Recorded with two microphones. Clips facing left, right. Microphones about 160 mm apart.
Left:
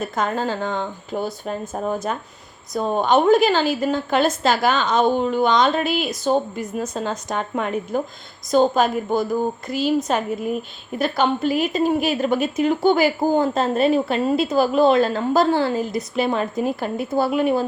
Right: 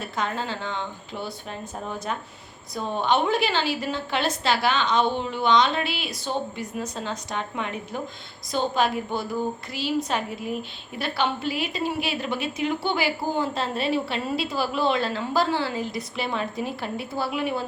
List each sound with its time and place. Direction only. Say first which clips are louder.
0.0 s a woman's voice: left 6 dB; 45° left (ahead or behind)
10.9 s a woman's voice: left 6 dB; 45° left (ahead or behind)